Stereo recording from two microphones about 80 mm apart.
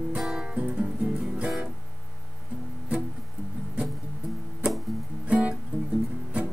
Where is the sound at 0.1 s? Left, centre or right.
Centre.